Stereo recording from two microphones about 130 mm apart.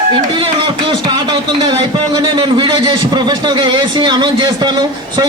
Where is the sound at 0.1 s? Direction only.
40° right (ahead or behind).